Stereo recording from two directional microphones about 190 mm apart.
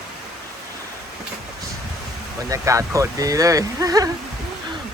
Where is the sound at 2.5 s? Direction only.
15° right (ahead or behind).